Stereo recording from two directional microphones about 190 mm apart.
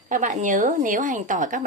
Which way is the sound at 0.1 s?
40° right (ahead or behind).